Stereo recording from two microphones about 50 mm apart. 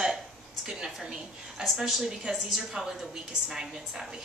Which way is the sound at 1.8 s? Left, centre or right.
Centre.